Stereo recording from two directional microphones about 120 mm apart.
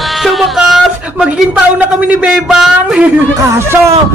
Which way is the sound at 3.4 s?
25° right (ahead or behind).